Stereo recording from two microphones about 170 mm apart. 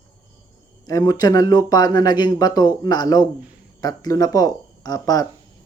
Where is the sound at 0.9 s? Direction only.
20° left (ahead or behind).